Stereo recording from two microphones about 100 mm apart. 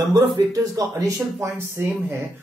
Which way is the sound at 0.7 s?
35° right (ahead or behind).